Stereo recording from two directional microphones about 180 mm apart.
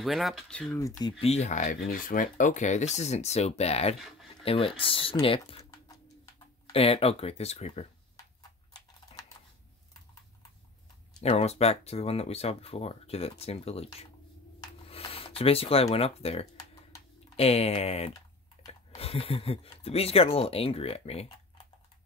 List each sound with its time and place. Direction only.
0.0 s speech: centre (ahead or behind)
0.7 s speech: 20° left (ahead or behind)
1.2 s speech: 35° left (ahead or behind)
4.0 s a sound: centre (ahead or behind)
4.5 s speech: 30° left (ahead or behind)
9.1 s typing: 35° left (ahead or behind)
11.2 s speech: 35° left (ahead or behind)
14.6 s a sound: 30° left (ahead or behind)
17.4 s speech: 35° left (ahead or behind)